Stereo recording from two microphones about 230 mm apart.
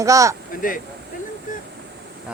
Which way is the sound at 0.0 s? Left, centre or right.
Centre.